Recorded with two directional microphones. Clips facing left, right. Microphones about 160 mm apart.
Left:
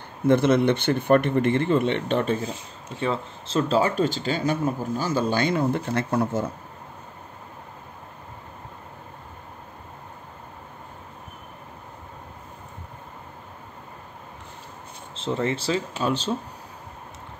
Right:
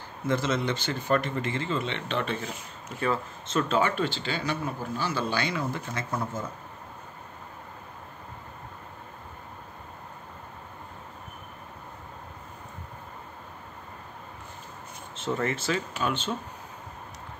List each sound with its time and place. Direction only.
0.2 s speech: 60° left (ahead or behind); by 2.4 s 45° left (ahead or behind)
2.4 s speech: 30° left (ahead or behind); by 5.9 s 55° left (ahead or behind)
5.9 s speech: 65° left (ahead or behind)
15.1 s speech: 30° left (ahead or behind)